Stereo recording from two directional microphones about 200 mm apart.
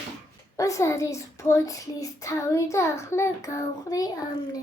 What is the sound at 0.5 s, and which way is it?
A child's voice, 15° left (ahead or behind).